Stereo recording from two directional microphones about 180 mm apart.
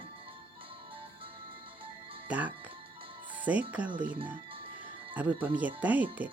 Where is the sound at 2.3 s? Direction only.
10° right (ahead or behind).